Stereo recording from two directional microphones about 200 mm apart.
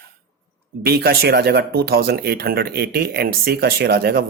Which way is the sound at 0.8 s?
50° right (ahead or behind).